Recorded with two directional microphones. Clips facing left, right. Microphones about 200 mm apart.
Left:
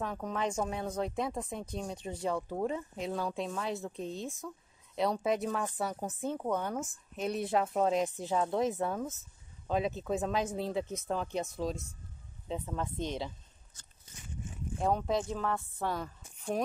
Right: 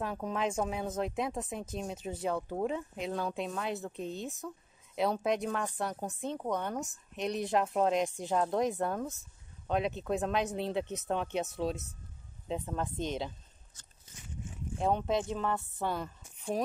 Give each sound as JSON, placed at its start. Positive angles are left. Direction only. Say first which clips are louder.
{"t": 0.0, "sound": "speech", "louder": "right 1 dB", "side_deg": -5}
{"t": 14.8, "sound": "speech", "louder": "even", "side_deg": 0}